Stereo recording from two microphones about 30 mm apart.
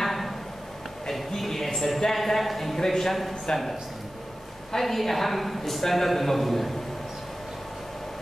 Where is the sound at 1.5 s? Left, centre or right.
Centre.